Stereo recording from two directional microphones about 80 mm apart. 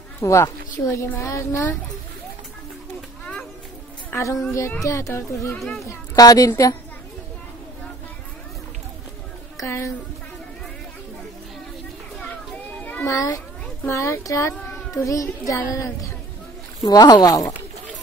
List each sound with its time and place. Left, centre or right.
0.2 s a woman's voice: left
4.1 s a woman's voice: left
5.9 s a child's voice: left
9.6 s a woman's voice: left
13.0 s a woman's voice: left
16.8 s speech: left